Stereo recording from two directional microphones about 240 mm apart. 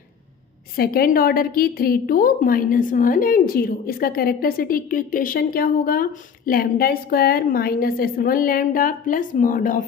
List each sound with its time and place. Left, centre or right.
0.7 s a woman's voice: left